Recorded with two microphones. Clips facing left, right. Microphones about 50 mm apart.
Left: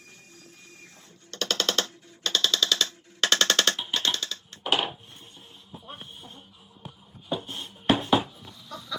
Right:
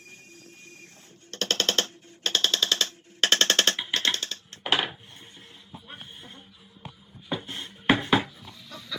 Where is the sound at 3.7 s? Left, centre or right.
Right.